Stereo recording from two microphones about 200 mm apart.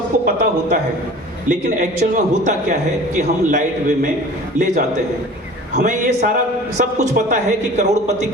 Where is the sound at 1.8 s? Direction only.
40° right (ahead or behind).